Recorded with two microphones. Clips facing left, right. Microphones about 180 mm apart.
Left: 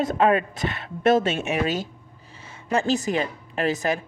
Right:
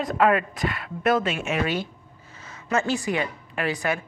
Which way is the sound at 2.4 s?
30° left (ahead or behind).